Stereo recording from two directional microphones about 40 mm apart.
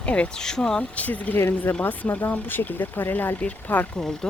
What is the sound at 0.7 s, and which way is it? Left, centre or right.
Speech, left.